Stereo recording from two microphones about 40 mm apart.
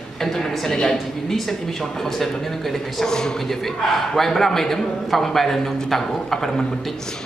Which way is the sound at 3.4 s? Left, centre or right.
Centre.